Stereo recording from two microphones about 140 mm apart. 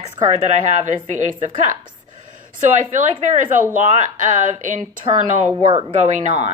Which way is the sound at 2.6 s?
65° right (ahead or behind).